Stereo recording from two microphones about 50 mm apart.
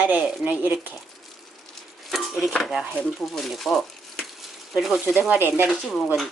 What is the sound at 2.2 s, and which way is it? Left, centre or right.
Dishes, centre.